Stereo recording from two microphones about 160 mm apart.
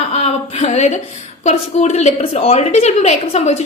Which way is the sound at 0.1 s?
40° left (ahead or behind).